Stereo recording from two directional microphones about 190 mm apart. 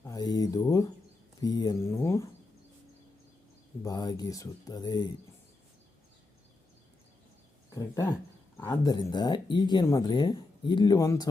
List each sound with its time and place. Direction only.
0.0 s speech: 20° left (ahead or behind)
3.8 s speech: 20° left (ahead or behind)
7.7 s speech: 15° left (ahead or behind)